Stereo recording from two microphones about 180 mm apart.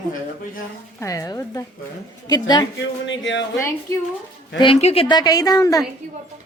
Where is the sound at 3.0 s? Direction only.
90° left.